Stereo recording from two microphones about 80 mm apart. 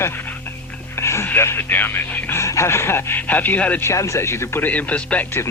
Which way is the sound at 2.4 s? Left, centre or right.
Left.